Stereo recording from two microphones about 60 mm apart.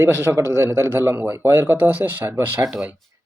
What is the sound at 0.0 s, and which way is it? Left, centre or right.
Speech, right.